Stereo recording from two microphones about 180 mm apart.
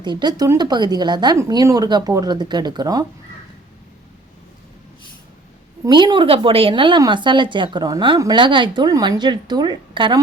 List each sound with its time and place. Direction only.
0.0 s a woman's voice: 25° right (ahead or behind)
5.8 s a woman's voice: 25° right (ahead or behind)